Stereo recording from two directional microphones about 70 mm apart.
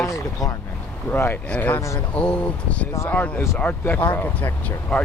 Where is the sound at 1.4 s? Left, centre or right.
Left.